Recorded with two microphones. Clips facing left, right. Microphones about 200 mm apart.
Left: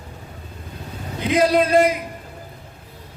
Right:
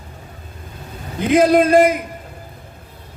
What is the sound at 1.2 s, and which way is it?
Speech, 50° right (ahead or behind).